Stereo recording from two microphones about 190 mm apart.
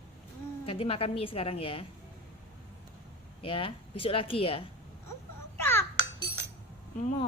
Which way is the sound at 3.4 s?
30° left (ahead or behind).